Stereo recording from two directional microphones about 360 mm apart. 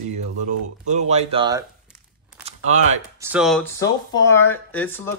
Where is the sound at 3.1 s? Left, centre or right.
Centre.